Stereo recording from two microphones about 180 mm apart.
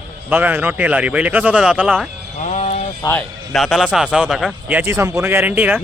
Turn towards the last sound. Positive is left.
turn(degrees=-10)  # may be behind; listen again after turning